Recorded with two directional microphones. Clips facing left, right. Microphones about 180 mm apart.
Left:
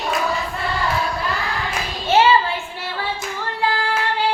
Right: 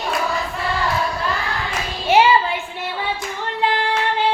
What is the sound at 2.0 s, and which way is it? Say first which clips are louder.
Clapping: right 1 dB; 15° right (ahead or behind).